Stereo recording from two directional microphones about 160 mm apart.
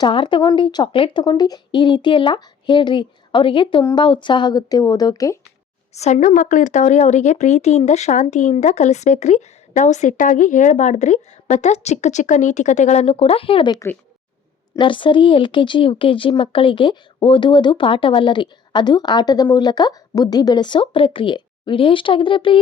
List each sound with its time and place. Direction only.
0.0 s a woman's voice: 30° left (ahead or behind)
5.9 s a woman's voice: 45° left (ahead or behind)
14.8 s a woman's voice: 30° left (ahead or behind)